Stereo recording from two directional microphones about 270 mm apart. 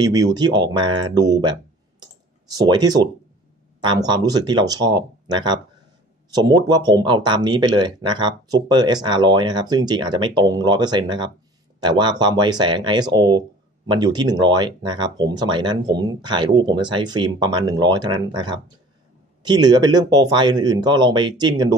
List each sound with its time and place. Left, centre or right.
0.0 s speech: centre